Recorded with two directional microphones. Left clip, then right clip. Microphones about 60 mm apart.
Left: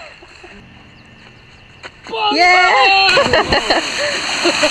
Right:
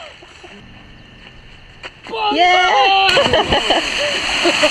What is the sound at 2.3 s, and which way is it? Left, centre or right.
Speech, left.